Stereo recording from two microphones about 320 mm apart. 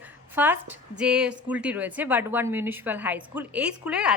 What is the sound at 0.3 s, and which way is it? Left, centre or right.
A woman's voice, centre.